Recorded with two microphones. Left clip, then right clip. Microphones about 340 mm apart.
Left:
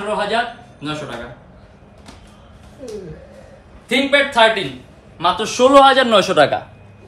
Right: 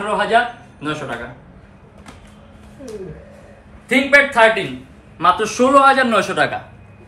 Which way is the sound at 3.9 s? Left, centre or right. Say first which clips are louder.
Right 2 dB; centre.